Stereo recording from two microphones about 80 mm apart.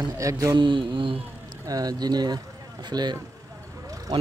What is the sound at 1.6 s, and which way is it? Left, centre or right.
Speech, right.